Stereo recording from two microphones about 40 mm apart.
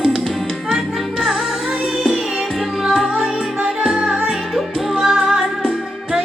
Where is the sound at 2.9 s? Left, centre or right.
Centre.